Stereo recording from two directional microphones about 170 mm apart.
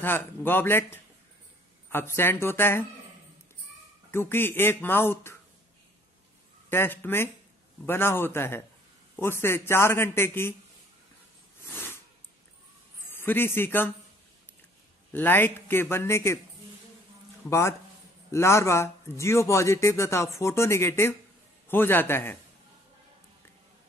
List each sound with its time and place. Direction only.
0.0 s speech: 10° left (ahead or behind)
4.1 s speech: 15° left (ahead or behind)
6.7 s speech: 10° left (ahead or behind)
11.6 s a sound: 15° left (ahead or behind)
13.1 s speech: 10° left (ahead or behind)
15.1 s speech: 10° left (ahead or behind)
17.5 s speech: 15° left (ahead or behind)